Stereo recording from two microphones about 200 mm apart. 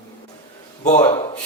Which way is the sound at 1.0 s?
20° left (ahead or behind).